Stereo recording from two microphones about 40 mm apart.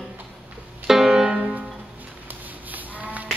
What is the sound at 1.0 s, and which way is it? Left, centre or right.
Music, centre.